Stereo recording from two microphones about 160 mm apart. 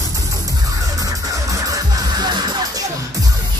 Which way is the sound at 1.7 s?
25° right (ahead or behind).